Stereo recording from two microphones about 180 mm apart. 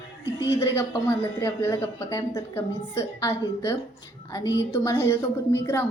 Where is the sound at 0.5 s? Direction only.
15° left (ahead or behind).